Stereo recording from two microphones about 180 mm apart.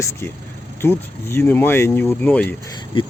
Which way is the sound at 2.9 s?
30° left (ahead or behind).